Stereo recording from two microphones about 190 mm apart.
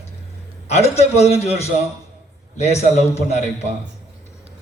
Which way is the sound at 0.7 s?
35° left (ahead or behind).